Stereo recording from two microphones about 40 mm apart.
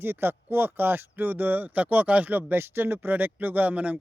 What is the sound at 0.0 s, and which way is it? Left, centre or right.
Speech, right.